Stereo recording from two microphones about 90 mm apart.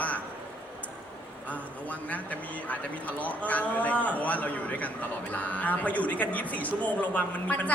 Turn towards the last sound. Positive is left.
turn(degrees=15)  # may be behind; listen again after turning